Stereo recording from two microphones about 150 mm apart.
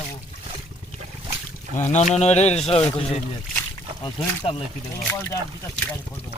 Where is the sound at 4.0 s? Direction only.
35° left (ahead or behind).